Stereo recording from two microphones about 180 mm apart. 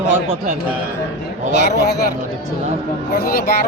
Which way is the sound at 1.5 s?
65° left (ahead or behind).